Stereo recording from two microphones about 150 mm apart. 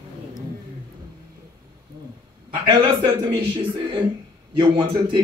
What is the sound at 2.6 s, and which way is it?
A man's voice, 30° right (ahead or behind).